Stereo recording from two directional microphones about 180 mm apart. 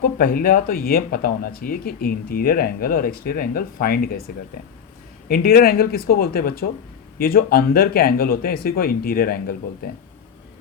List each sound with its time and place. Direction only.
0.0 s speech: 50° left (ahead or behind)
5.3 s speech: 55° left (ahead or behind)